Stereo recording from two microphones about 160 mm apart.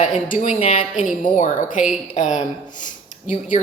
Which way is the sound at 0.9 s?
50° left (ahead or behind).